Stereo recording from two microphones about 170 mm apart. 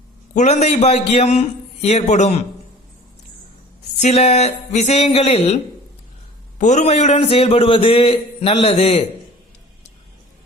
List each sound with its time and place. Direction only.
0.3 s a man's voice: 40° left (ahead or behind)
4.0 s a man's voice: 40° left (ahead or behind)
6.6 s a man's voice: 45° left (ahead or behind)